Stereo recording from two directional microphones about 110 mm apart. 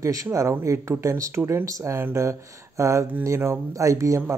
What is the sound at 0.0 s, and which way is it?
Speech, 30° right (ahead or behind).